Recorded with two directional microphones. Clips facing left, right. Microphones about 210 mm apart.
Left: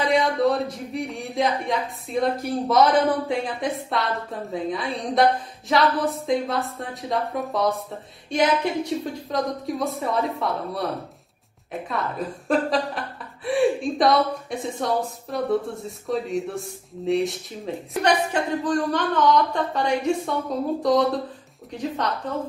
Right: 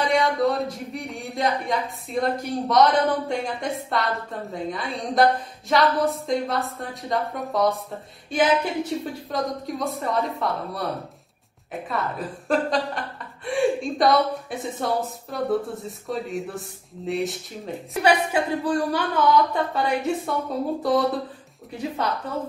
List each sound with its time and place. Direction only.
0.0 s a woman's voice: centre (ahead or behind)
9.0 s a woman's voice: centre (ahead or behind)